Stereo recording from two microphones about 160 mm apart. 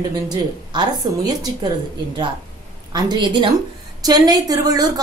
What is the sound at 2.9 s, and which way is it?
A woman's voice, 25° right (ahead or behind).